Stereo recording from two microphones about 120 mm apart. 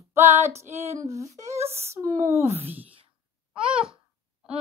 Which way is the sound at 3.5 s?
10° right (ahead or behind).